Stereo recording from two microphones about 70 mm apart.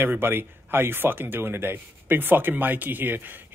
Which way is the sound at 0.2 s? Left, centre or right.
Right.